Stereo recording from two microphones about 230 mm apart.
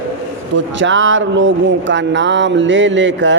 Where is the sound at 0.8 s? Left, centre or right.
Right.